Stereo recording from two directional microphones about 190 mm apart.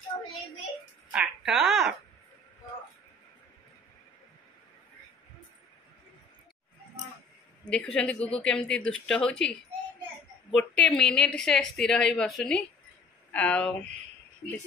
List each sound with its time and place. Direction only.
0.1 s child singing: 20° left (ahead or behind)
1.1 s a sound: 5° right (ahead or behind)
7.6 s a woman's voice: 5° left (ahead or behind)
10.5 s a woman's voice: 10° left (ahead or behind)